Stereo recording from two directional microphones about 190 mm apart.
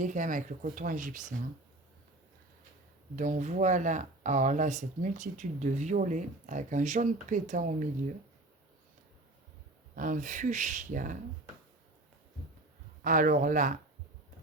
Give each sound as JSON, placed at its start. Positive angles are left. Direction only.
{"t": 0.0, "sound": "speech", "side_deg": -40}
{"t": 3.2, "sound": "speech", "side_deg": -40}
{"t": 9.9, "sound": "speech", "side_deg": -45}
{"t": 13.0, "sound": "speech", "side_deg": -45}